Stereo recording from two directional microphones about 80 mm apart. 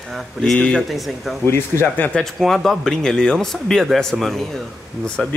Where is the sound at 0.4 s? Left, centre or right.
Centre.